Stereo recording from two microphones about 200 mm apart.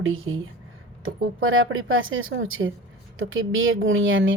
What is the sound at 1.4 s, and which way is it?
Speech, 80° right.